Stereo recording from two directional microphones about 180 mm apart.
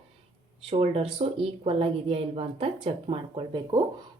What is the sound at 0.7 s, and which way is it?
A woman's voice, 30° right (ahead or behind).